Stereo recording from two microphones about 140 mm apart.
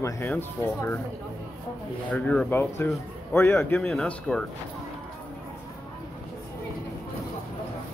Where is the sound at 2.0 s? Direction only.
5° left (ahead or behind).